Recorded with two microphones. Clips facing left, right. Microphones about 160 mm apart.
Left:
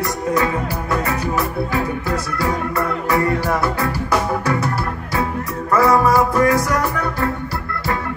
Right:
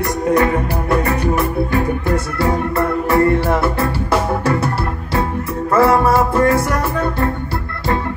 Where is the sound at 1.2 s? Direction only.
55° right (ahead or behind).